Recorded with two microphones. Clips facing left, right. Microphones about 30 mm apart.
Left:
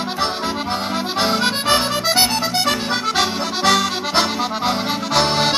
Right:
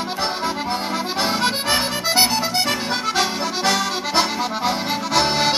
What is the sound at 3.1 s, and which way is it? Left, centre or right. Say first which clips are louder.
Accordion: left 1 dB; centre.